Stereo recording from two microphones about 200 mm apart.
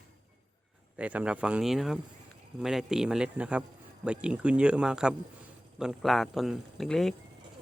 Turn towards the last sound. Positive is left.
turn(degrees=0)  # may be behind; listen again after turning